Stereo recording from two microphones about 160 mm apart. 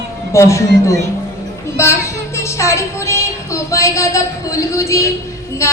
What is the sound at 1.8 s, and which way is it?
Music, 15° left (ahead or behind).